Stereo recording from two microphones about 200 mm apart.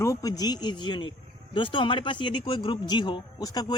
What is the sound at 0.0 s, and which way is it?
Speech, 15° left (ahead or behind).